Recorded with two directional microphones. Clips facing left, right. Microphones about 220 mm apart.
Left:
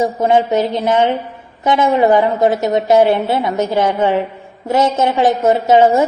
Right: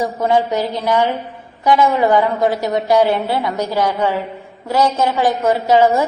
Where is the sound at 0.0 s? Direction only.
20° left (ahead or behind).